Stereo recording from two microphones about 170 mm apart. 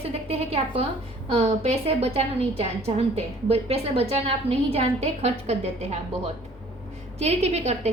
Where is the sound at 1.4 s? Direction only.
35° right (ahead or behind).